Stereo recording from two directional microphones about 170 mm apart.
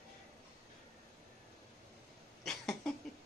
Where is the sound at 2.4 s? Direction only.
5° left (ahead or behind).